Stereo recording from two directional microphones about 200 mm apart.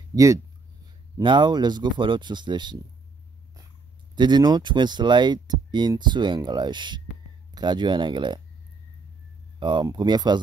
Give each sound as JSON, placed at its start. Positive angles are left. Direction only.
{"t": 0.1, "sound": "speech", "side_deg": -15}
{"t": 4.1, "sound": "speech", "side_deg": -20}
{"t": 9.6, "sound": "speech", "side_deg": -25}